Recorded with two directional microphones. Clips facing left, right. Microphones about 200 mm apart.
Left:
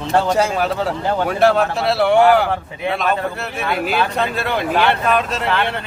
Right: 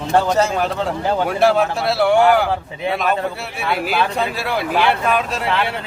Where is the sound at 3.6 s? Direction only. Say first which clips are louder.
Even; 5° right (ahead or behind).